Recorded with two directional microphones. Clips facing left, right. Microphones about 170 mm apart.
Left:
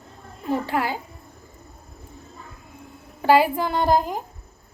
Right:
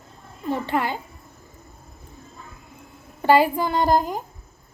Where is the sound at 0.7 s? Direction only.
5° left (ahead or behind).